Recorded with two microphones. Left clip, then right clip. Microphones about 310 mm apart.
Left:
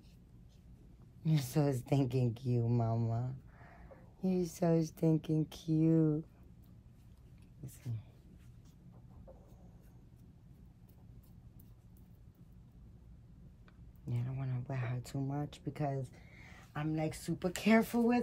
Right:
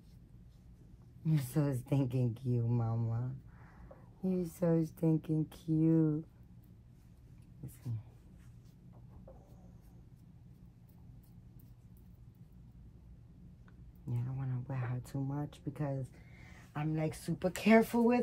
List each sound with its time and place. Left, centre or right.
1.2 s speech: centre
14.0 s speech: centre
16.7 s speech: centre